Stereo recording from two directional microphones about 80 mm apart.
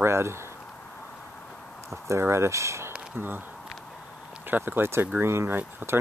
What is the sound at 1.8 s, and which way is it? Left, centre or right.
Speech, right.